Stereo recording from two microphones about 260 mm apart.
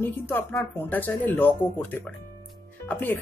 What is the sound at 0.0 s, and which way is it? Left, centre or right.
Speech, centre.